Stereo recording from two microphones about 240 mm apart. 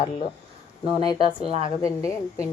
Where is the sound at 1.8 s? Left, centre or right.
Centre.